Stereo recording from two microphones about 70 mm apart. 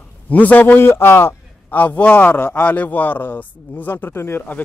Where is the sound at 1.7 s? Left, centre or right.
Left.